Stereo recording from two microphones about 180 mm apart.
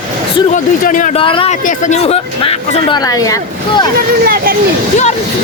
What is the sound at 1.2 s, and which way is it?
Speech, 30° left (ahead or behind).